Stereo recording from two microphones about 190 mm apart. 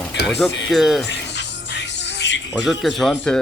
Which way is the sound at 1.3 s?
65° left (ahead or behind).